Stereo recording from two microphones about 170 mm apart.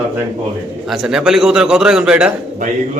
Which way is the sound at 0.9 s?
5° right (ahead or behind).